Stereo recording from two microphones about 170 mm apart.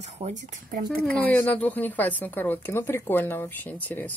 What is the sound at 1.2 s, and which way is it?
Speech, 10° left (ahead or behind).